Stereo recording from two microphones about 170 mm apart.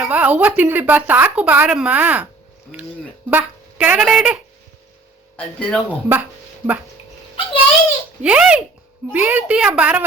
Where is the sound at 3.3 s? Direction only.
10° right (ahead or behind).